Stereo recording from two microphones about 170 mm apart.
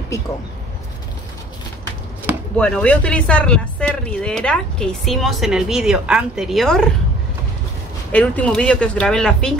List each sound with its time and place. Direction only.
2.5 s speech: 5° left (ahead or behind)
8.1 s speech: 10° left (ahead or behind)